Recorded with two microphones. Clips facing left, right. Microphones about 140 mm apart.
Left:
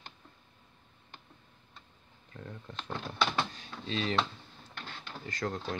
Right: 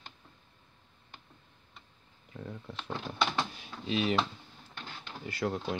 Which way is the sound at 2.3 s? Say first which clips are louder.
Right 2 dB; 10° right (ahead or behind).